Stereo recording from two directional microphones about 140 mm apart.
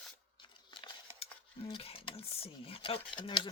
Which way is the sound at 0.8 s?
35° left (ahead or behind).